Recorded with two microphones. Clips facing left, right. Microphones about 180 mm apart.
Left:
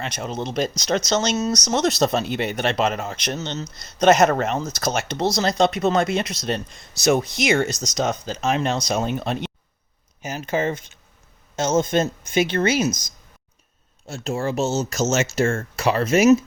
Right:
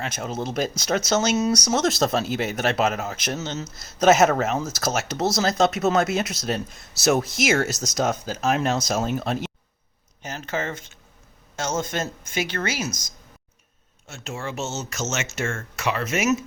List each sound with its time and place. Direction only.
0.0 s speech: 5° right (ahead or behind)
10.2 s speech: 15° left (ahead or behind)
14.1 s speech: 35° left (ahead or behind)